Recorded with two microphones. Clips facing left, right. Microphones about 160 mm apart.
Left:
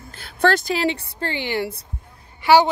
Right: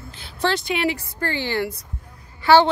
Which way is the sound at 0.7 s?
30° left (ahead or behind).